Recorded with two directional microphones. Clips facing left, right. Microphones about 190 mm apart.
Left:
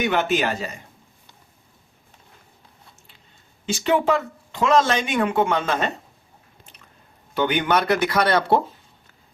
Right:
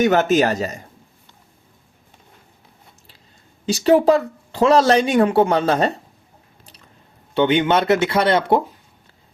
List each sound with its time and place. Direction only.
0.0 s speech: 40° right (ahead or behind)
3.7 s speech: 35° right (ahead or behind)
7.3 s speech: 25° right (ahead or behind)